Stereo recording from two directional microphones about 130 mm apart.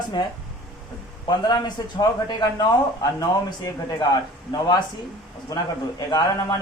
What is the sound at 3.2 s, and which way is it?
A man's voice, 30° left (ahead or behind).